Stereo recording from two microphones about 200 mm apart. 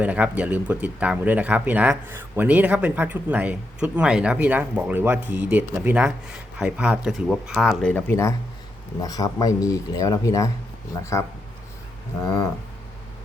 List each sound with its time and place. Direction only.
0.0 s speech: 5° right (ahead or behind); by 11.3 s 15° left (ahead or behind)